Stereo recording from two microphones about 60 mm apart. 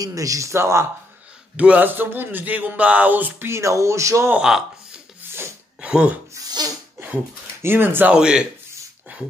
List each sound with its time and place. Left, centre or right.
0.0 s speech: right
1.6 s speech: right
2.0 s speech: right
3.4 s speech: right
4.4 s speech: centre
5.8 s speech: centre
7.6 s speech: right
8.1 s speech: centre